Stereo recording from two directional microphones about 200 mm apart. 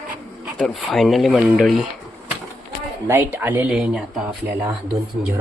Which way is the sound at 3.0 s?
10° right (ahead or behind).